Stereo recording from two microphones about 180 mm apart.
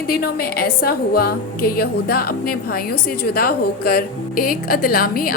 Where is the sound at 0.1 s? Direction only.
60° left (ahead or behind).